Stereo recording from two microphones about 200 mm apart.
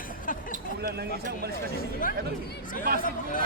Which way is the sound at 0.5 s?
50° right (ahead or behind).